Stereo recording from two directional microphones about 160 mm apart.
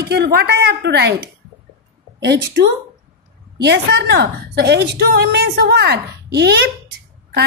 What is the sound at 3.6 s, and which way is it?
A woman's voice, 90° right.